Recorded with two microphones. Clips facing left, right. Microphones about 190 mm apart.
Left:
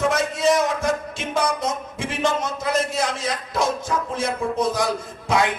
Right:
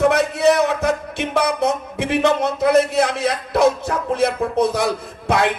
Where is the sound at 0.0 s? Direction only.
65° right (ahead or behind).